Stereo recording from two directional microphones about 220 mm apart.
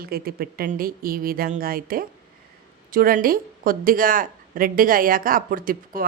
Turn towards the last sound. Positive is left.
turn(degrees=-40)  # may be behind; listen again after turning